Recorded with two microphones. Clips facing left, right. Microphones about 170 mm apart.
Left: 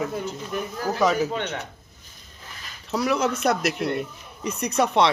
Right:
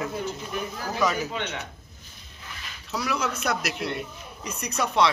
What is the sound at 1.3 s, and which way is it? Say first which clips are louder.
Speech: left 3 dB; 45° left (ahead or behind).